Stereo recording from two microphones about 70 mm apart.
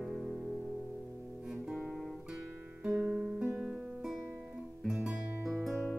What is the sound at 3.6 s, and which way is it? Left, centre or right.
Music, centre.